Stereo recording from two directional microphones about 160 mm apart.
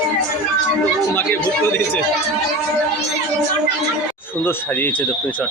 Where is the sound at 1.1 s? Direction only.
15° left (ahead or behind).